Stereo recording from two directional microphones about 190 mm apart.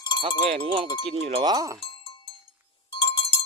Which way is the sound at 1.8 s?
30° left (ahead or behind).